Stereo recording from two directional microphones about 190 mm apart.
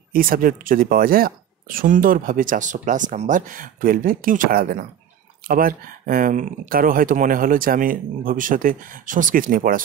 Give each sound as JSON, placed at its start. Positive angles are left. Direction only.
{"t": 0.1, "sound": "speech", "side_deg": -50}